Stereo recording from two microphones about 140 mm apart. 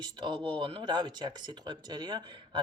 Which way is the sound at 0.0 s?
30° right (ahead or behind).